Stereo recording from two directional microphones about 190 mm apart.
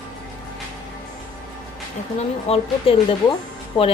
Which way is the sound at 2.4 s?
30° left (ahead or behind).